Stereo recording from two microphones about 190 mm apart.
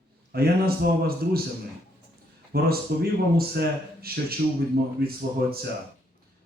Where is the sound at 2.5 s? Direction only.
55° right (ahead or behind).